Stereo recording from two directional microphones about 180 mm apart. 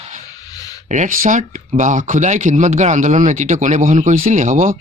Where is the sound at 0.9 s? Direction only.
45° right (ahead or behind).